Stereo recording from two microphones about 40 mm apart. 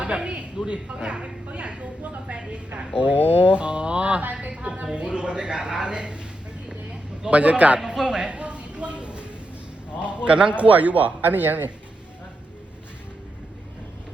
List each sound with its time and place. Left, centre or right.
0.0 s speech: right
7.3 s a man's voice: right
7.8 s a man's voice: centre
8.0 s a sound: right
10.0 s a man's voice: right
10.6 s speech: right